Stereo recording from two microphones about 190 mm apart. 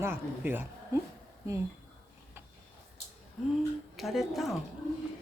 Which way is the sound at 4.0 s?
Centre (ahead or behind).